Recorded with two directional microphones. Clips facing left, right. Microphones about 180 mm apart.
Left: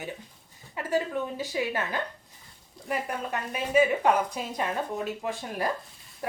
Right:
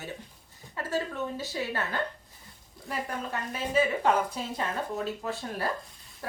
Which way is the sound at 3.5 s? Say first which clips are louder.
Left 4 dB; 15° left (ahead or behind).